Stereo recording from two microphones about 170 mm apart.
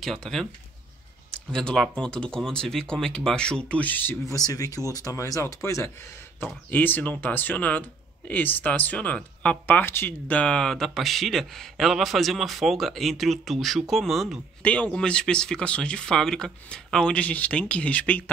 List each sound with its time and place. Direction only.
0.0 s speech: centre (ahead or behind)
1.5 s speech: 5° left (ahead or behind)